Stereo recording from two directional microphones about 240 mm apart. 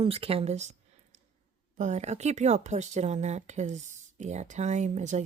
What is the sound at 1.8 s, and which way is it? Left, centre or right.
Speech, right.